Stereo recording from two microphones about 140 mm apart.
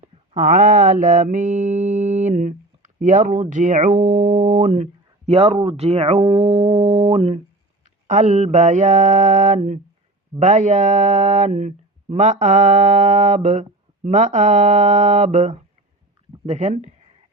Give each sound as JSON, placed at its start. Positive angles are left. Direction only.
{"t": 0.0, "sound": "mantra", "side_deg": -65}
{"t": 8.0, "sound": "mantra", "side_deg": -60}